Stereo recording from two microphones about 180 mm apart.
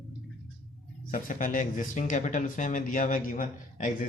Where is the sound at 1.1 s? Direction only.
50° left (ahead or behind).